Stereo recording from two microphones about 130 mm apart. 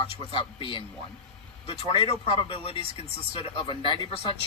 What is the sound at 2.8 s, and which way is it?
Speech, 45° right (ahead or behind).